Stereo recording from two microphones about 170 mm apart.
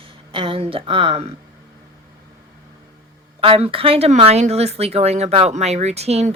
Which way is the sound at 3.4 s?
35° right (ahead or behind).